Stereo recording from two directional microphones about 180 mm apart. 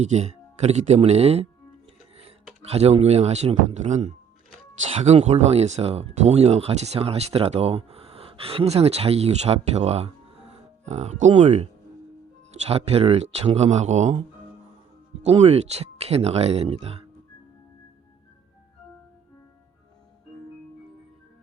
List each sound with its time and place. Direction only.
0.0 s speech: 40° right (ahead or behind)
2.6 s speech: 35° right (ahead or behind)